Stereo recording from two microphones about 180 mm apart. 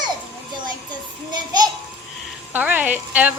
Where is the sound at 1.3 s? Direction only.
25° right (ahead or behind).